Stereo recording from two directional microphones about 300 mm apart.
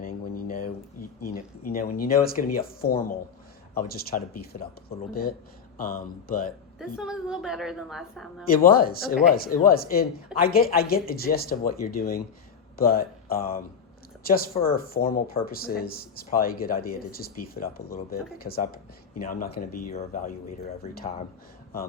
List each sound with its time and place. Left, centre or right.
0.0 s a sound: left
1.3 s speech: left
5.7 s speech: left
6.7 s a woman's voice: centre
8.4 s speech: left